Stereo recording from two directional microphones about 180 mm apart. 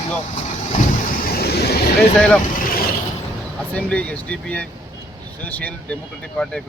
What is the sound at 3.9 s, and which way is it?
Speech, 10° left (ahead or behind).